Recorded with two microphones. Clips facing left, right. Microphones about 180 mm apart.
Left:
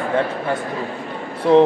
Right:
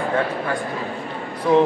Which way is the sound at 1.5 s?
30° left (ahead or behind).